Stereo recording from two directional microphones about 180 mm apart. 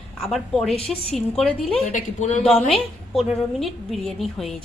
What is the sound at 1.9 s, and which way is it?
Speech, 40° left (ahead or behind).